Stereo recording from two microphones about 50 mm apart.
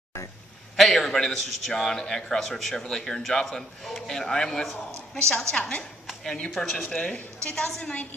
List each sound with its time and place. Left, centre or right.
0.7 s a man's voice: centre
5.6 s a woman's voice: left
6.5 s a man's voice: centre; by 8.1 s left